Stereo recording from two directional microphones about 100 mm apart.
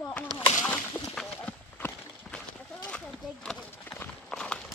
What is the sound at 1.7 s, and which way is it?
Clip-clop, 20° left (ahead or behind).